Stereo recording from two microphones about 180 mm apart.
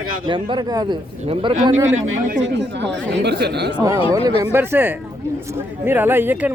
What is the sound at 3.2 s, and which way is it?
Speech, 65° right (ahead or behind).